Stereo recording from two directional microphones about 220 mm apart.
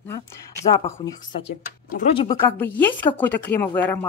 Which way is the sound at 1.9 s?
30° left (ahead or behind).